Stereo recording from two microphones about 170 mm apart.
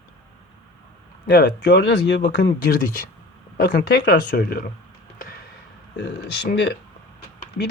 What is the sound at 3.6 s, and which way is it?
Speech, 70° left (ahead or behind).